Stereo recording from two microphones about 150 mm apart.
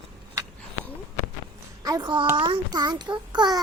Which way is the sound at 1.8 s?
25° right (ahead or behind).